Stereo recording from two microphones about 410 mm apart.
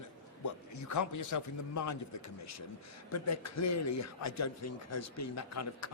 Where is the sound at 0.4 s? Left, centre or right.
Left.